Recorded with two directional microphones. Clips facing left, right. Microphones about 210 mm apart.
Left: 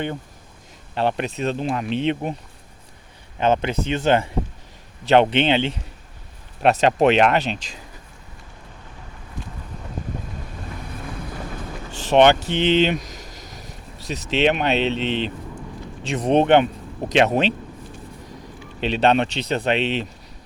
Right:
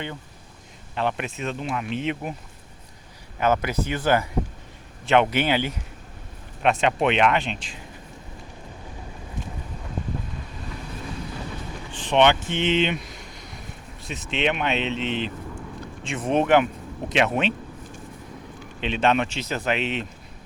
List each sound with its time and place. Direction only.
0.9 s a man's voice: 35° left (ahead or behind)
3.4 s speech: 25° left (ahead or behind)
6.6 s a man's voice: 40° left (ahead or behind)
11.9 s a sound: 40° left (ahead or behind)
14.1 s a man's voice: 35° left (ahead or behind)
18.8 s a man's voice: 35° left (ahead or behind)